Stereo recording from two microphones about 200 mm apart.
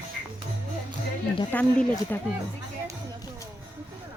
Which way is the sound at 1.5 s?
5° left (ahead or behind).